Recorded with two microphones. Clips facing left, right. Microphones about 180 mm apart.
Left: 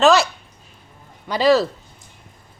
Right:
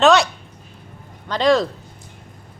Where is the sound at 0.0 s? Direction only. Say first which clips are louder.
Even; centre (ahead or behind).